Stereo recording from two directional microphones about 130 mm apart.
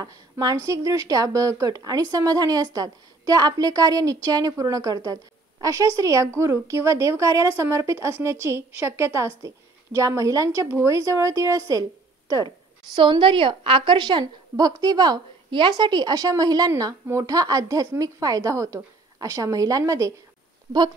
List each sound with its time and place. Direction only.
0.0 s a woman's voice: 30° right (ahead or behind)